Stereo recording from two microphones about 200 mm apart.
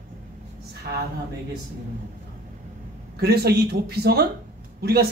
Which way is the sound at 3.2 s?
50° right (ahead or behind).